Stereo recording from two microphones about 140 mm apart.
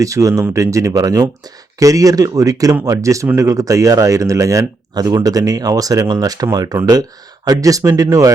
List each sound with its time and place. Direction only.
0.0 s speech: 25° right (ahead or behind)